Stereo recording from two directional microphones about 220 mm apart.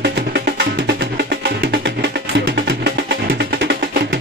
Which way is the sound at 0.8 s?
50° right (ahead or behind).